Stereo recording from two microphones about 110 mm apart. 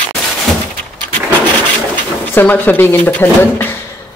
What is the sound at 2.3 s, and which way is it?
Speech, 15° left (ahead or behind).